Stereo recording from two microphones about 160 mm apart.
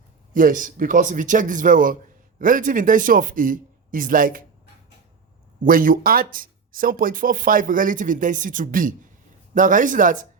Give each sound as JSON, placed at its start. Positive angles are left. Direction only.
{"t": 0.3, "sound": "speech", "side_deg": -55}
{"t": 5.6, "sound": "speech", "side_deg": -60}